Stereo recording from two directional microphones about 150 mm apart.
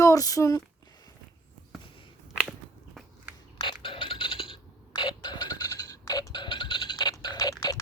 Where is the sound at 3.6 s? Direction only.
35° left (ahead or behind).